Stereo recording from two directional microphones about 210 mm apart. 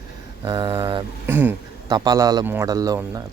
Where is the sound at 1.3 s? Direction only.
10° right (ahead or behind).